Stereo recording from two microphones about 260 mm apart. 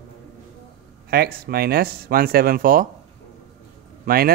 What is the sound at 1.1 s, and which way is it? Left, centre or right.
Speech, right.